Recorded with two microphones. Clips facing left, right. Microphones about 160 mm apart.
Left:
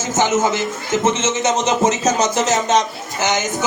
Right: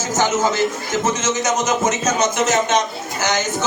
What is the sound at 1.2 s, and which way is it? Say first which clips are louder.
Speech: left 2 dB; 25° left (ahead or behind).